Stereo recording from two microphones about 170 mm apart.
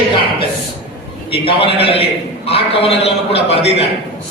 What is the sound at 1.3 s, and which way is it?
A man's voice, 35° left (ahead or behind).